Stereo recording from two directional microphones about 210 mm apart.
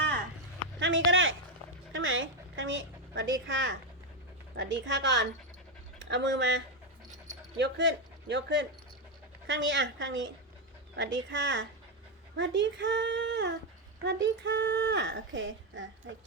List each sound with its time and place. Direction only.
0.8 s a sound: 60° right (ahead or behind)
4.5 s speech: 60° right (ahead or behind)
7.6 s speech: 55° right (ahead or behind)